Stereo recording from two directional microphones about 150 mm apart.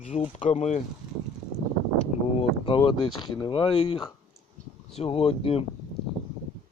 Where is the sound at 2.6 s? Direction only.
35° left (ahead or behind).